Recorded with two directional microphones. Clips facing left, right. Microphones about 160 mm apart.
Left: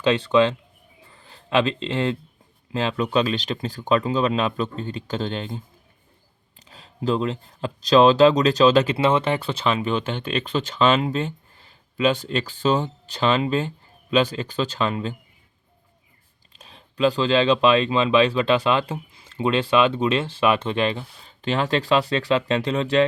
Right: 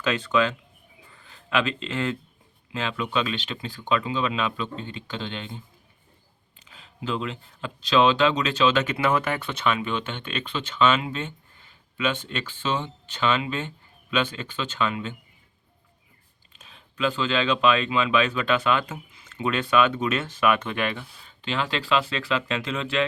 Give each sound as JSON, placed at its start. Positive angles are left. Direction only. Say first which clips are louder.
{"t": 0.0, "sound": "speech", "louder": "left 5 dB", "side_deg": 30}
{"t": 6.7, "sound": "speech", "louder": "left 7 dB", "side_deg": 35}
{"t": 16.5, "sound": "speech", "louder": "left 4 dB", "side_deg": 35}